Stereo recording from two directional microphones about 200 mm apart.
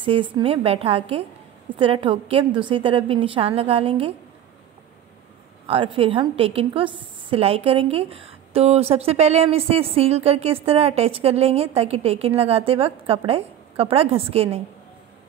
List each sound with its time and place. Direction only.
0.0 s a woman's voice: 25° right (ahead or behind)
5.7 s a woman's voice: 25° right (ahead or behind)